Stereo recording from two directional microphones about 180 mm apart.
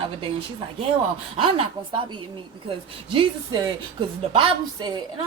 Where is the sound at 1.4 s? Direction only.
30° right (ahead or behind).